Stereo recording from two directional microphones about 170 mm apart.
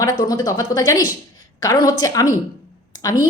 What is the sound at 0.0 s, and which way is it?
A woman's voice, 20° left (ahead or behind).